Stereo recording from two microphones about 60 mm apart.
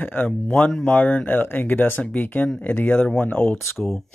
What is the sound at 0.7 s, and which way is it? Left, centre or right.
Speech, centre.